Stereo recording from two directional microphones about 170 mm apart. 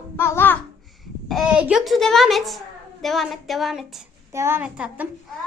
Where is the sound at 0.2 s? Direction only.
15° left (ahead or behind).